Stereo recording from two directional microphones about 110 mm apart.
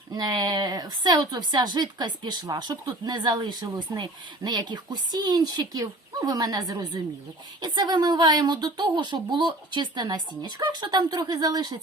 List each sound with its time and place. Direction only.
0.1 s speech: 40° right (ahead or behind)